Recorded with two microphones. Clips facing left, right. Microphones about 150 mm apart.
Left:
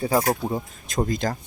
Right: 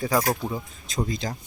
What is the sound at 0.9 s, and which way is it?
Speech, 50° left (ahead or behind).